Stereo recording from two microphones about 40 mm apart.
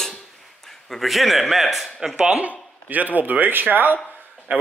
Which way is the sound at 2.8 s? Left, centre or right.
Right.